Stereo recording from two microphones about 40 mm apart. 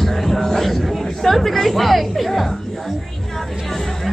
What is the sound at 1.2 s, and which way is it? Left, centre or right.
Speech, centre.